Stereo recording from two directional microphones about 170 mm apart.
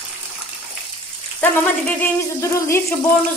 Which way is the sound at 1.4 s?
10° left (ahead or behind).